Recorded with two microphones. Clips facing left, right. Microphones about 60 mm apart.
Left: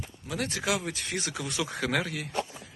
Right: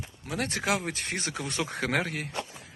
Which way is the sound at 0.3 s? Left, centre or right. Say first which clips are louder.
Right 1 dB; right.